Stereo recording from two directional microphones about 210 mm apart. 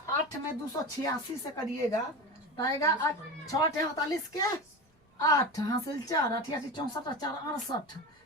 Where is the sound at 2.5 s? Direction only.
15° left (ahead or behind).